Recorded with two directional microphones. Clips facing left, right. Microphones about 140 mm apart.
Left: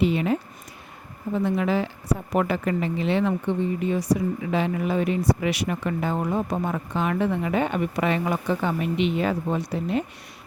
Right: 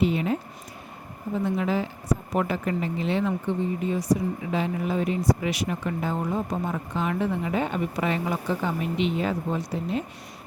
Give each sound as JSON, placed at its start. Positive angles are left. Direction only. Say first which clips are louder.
{"t": 0.0, "sound": "speech", "louder": "left 2 dB", "side_deg": 80}
{"t": 1.5, "sound": "a woman's voice", "louder": "left 2 dB", "side_deg": 75}